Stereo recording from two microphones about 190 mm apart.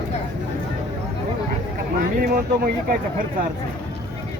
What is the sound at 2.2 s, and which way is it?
Speech, 50° right (ahead or behind).